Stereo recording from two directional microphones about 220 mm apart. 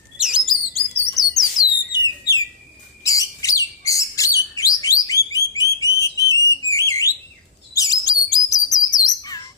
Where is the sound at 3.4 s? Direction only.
15° left (ahead or behind).